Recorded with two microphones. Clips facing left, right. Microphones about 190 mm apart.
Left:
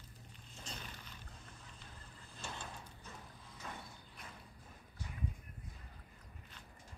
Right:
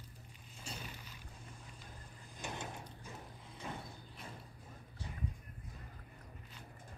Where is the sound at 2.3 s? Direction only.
20° right (ahead or behind).